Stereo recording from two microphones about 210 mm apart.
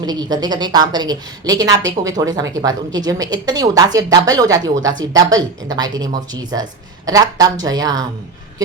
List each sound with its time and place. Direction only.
0.0 s a woman's voice: 20° right (ahead or behind)